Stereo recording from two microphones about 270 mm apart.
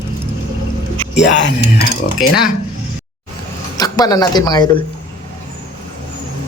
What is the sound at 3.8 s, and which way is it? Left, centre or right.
Speech, centre.